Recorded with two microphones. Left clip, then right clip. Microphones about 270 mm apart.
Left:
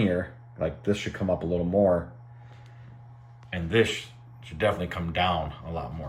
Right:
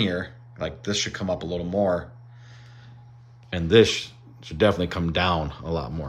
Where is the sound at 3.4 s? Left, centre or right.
Centre.